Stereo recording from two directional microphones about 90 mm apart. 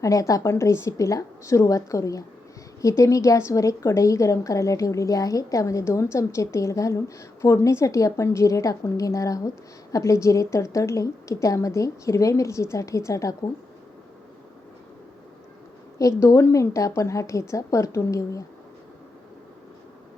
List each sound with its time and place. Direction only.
0.0 s a woman's voice: 40° left (ahead or behind)
16.0 s a woman's voice: 35° left (ahead or behind)